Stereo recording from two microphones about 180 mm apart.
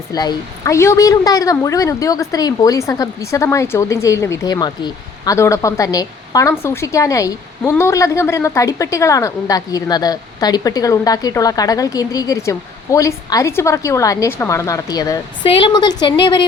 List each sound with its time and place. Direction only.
0.1 s a woman's voice: 20° left (ahead or behind)